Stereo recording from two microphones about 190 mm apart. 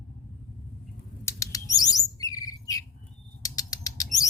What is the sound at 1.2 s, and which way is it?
Bird, 15° left (ahead or behind).